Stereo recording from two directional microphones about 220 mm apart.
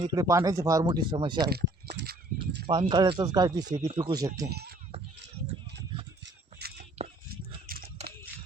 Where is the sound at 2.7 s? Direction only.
20° right (ahead or behind).